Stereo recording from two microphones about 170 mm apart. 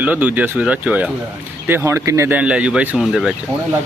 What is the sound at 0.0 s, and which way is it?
Speech, 10° right (ahead or behind).